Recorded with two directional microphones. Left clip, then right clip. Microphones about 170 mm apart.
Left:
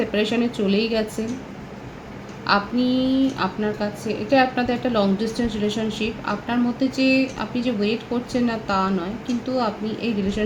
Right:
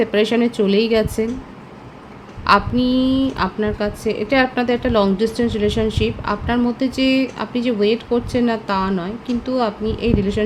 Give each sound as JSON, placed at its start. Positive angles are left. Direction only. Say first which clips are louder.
{"t": 0.0, "sound": "speech", "louder": "right 5 dB", "side_deg": -85}
{"t": 2.5, "sound": "a woman's voice", "louder": "right 5 dB", "side_deg": -90}